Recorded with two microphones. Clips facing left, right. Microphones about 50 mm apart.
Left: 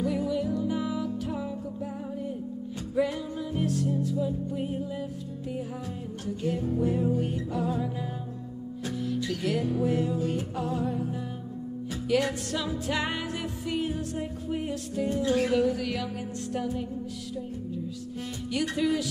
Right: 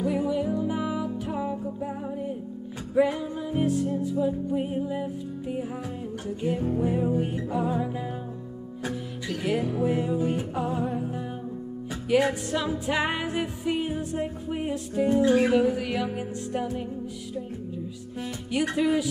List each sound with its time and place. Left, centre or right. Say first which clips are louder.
0.0 s music: right 2 dB; centre
2.9 s music: right 5 dB; right
6.2 s music: right 2 dB; right
12.1 s music: right 4 dB; right
18.5 s music: right 3 dB; right